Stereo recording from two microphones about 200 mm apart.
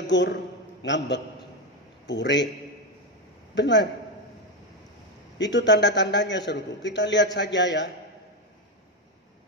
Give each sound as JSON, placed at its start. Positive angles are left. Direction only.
{"t": 0.0, "sound": "a man's voice", "side_deg": 60}
{"t": 3.5, "sound": "a man's voice", "side_deg": 60}
{"t": 5.4, "sound": "a man's voice", "side_deg": 60}